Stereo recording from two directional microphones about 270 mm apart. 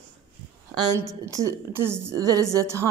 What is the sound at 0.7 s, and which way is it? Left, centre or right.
Speech, centre.